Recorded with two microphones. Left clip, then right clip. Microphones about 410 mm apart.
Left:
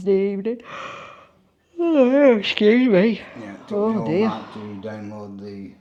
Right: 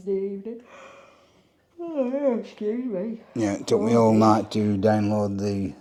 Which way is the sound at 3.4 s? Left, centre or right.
Right.